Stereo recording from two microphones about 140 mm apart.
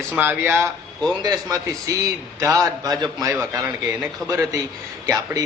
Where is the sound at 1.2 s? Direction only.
25° right (ahead or behind).